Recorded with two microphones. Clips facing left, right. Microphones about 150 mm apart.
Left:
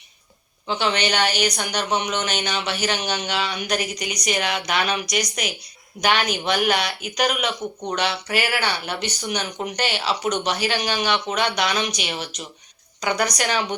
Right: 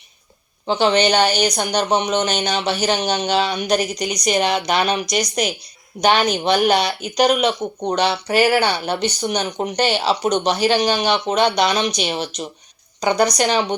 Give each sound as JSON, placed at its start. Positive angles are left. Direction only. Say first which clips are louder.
{"t": 0.7, "sound": "a woman's voice", "louder": "right 7 dB", "side_deg": -35}